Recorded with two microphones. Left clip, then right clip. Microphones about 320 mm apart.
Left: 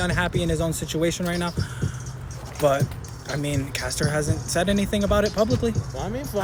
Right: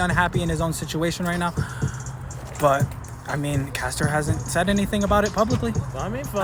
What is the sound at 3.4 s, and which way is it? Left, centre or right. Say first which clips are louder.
Speech: even; right.